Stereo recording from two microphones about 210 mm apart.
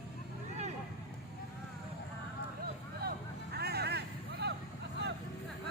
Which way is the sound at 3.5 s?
50° right (ahead or behind).